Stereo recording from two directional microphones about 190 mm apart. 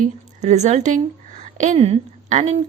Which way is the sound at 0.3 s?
35° right (ahead or behind).